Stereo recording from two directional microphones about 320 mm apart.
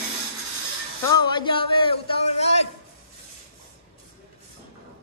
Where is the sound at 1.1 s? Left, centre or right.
Centre.